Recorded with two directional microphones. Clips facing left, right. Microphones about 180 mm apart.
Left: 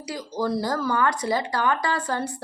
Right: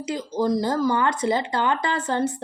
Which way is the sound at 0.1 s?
20° right (ahead or behind).